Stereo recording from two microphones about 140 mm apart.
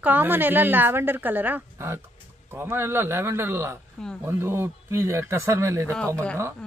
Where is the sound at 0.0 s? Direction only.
15° right (ahead or behind).